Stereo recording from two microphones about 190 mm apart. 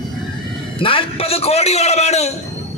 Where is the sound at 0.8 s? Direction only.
30° left (ahead or behind).